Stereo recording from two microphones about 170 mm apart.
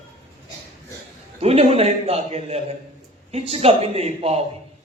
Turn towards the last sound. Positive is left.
turn(degrees=-40)  # may be behind; listen again after turning